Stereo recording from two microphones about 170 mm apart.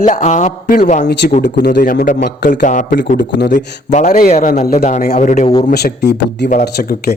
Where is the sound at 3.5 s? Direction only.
45° left (ahead or behind).